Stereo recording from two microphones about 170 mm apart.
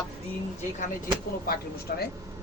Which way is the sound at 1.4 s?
60° left (ahead or behind).